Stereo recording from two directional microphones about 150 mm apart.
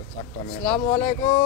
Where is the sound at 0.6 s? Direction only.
10° left (ahead or behind).